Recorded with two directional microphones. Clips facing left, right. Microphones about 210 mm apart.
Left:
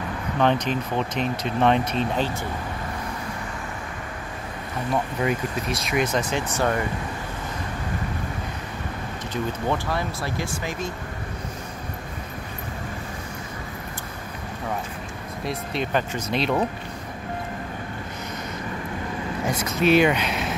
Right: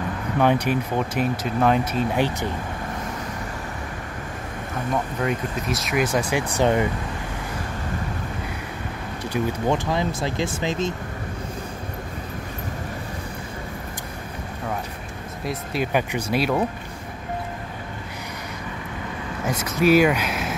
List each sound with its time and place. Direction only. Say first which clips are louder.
0.4 s speech: right 2 dB; 10° right (ahead or behind)
5.2 s speech: even; centre (ahead or behind)
6.1 s speech: right 2 dB; 15° right (ahead or behind)
9.3 s speech: right 3 dB; 15° right (ahead or behind)
15.4 s speech: right 2 dB; 5° right (ahead or behind)
19.6 s speech: right 2 dB; 5° right (ahead or behind)